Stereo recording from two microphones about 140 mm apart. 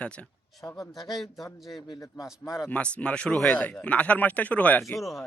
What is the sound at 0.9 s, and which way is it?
Speech, centre (ahead or behind).